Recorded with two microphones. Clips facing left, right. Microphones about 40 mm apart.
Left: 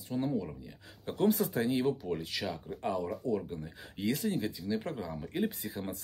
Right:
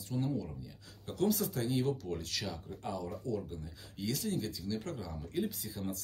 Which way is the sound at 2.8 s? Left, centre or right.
Left.